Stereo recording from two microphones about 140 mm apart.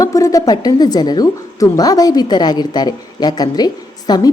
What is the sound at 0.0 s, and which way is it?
Speech, 25° left (ahead or behind).